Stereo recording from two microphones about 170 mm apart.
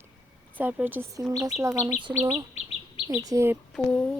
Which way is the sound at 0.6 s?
10° right (ahead or behind).